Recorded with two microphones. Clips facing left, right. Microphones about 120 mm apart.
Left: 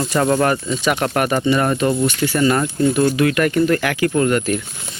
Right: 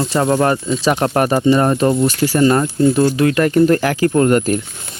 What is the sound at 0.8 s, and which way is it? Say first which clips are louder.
Speech: right 4 dB; 30° right (ahead or behind).